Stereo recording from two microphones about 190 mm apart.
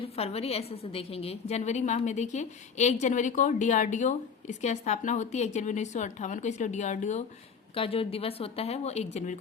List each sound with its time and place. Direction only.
0.2 s a woman's voice: 30° left (ahead or behind)